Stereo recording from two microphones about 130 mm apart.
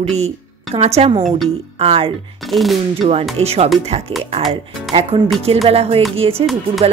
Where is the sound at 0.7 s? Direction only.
50° right (ahead or behind).